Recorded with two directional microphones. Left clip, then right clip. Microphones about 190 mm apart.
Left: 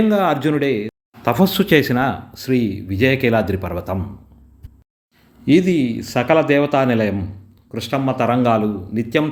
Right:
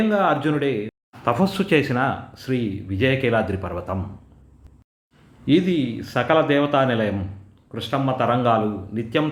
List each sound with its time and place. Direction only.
0.1 s speech: 35° left (ahead or behind)
5.5 s speech: 35° left (ahead or behind)